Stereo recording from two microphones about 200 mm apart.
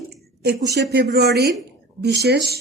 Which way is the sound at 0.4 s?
55° right (ahead or behind).